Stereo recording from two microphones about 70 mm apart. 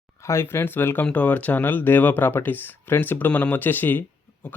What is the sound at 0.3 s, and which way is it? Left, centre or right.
Speech, left.